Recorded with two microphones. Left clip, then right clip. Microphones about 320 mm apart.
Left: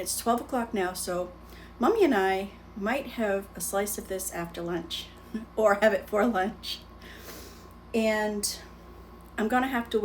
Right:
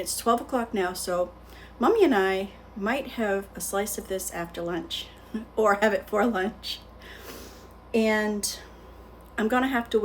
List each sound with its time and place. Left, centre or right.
0.0 s a woman's voice: centre
9.3 s a woman's voice: centre